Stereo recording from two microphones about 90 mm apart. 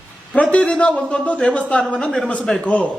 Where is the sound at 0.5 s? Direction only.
15° left (ahead or behind).